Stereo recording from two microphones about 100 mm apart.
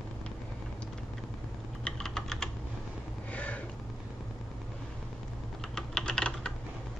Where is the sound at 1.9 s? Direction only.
5° left (ahead or behind).